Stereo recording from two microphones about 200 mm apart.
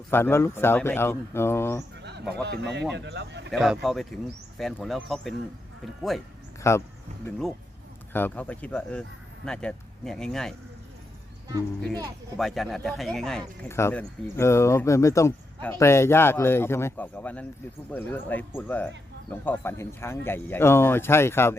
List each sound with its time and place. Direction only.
0.1 s speech: 10° left (ahead or behind)
2.0 s bird: 55° right (ahead or behind)
2.3 s speech: 60° right (ahead or behind)
3.5 s speech: centre (ahead or behind)
6.6 s speech: 15° left (ahead or behind)
7.3 s speech: centre (ahead or behind)
12.4 s speech: centre (ahead or behind)